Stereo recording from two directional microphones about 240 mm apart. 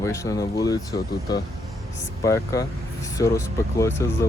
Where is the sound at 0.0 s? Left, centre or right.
Centre.